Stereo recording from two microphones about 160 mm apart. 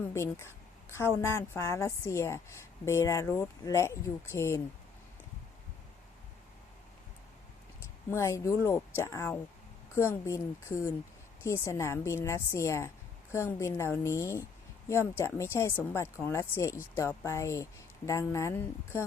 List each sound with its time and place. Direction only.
0.0 s a woman's voice: 15° left (ahead or behind)
8.1 s speech: 15° left (ahead or behind)